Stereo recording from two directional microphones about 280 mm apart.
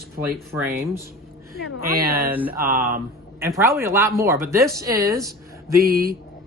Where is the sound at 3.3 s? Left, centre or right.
Centre.